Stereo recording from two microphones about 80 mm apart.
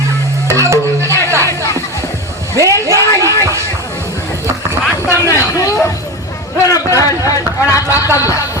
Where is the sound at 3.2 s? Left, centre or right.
Right.